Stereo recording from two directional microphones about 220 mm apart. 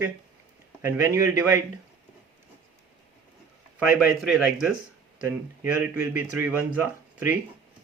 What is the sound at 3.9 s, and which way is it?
A man's voice, centre (ahead or behind).